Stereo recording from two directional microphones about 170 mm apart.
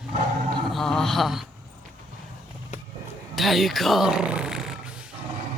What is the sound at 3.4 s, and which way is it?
Speech, centre (ahead or behind).